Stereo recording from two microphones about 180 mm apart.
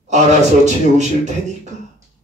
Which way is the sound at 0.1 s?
40° right (ahead or behind).